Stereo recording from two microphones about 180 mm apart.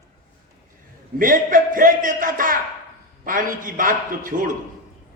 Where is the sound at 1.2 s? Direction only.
50° right (ahead or behind).